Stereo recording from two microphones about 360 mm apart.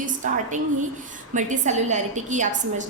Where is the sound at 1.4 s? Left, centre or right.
Centre.